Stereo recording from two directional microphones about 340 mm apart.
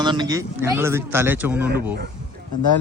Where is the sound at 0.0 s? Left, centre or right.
Centre.